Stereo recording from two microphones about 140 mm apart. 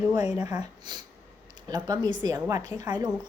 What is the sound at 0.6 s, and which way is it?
Speech, 30° right (ahead or behind).